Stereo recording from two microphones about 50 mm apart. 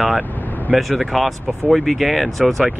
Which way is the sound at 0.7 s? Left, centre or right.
Centre.